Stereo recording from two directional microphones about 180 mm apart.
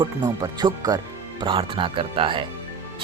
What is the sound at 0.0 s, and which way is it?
Speech, 20° right (ahead or behind).